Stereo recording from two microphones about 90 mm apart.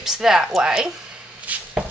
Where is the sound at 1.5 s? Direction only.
15° right (ahead or behind).